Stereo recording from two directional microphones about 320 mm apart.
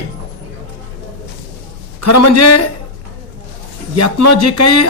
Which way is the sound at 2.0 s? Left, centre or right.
Left.